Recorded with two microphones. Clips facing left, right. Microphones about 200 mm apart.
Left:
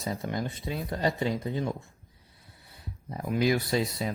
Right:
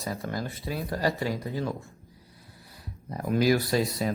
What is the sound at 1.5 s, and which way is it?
Speech, 15° left (ahead or behind).